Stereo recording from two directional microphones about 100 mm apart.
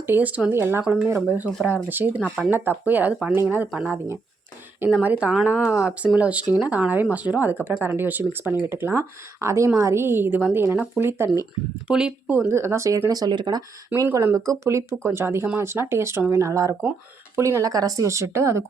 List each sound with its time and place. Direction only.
0.0 s a woman's voice: 20° right (ahead or behind)
3.3 s a woman's voice: 20° right (ahead or behind)
11.9 s speech: 10° right (ahead or behind)
12.3 s speech: 25° right (ahead or behind); by 13.6 s 45° right (ahead or behind)
13.9 s a woman's voice: 30° right (ahead or behind)